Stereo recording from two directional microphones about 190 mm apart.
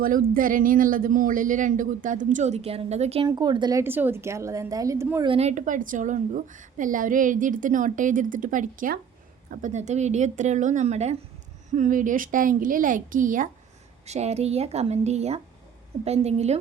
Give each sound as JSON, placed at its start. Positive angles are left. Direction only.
{"t": 0.0, "sound": "a woman's voice", "side_deg": -45}
{"t": 3.2, "sound": "a woman's voice", "side_deg": -20}
{"t": 5.2, "sound": "a woman's voice", "side_deg": -30}